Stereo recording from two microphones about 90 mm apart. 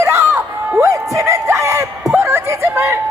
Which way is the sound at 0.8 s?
35° right (ahead or behind).